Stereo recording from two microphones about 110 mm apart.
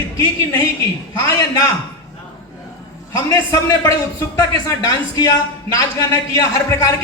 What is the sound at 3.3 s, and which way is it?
A man's voice, 30° left (ahead or behind).